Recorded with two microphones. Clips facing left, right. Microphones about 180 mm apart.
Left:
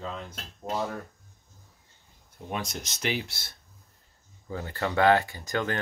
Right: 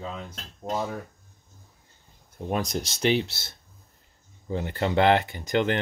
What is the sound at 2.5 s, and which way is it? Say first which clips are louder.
Speech: right 6 dB; 35° right (ahead or behind).